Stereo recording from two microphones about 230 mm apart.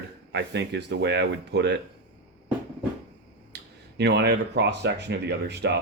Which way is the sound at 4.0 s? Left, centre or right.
Right.